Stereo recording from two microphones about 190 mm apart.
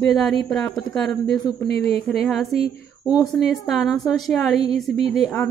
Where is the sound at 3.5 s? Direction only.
Centre (ahead or behind).